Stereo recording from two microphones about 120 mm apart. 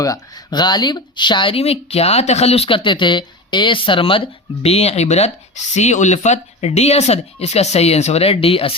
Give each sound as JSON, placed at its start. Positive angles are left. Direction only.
{"t": 0.0, "sound": "speech", "side_deg": 30}
{"t": 4.6, "sound": "speech", "side_deg": 60}